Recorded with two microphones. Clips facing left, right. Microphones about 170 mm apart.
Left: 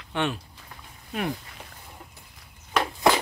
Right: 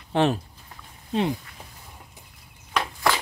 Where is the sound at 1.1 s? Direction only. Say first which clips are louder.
Right 5 dB; 25° right (ahead or behind).